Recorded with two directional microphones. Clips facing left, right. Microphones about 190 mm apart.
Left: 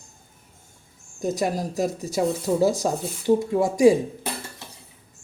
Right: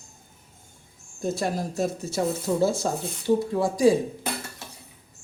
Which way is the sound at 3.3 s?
20° left (ahead or behind).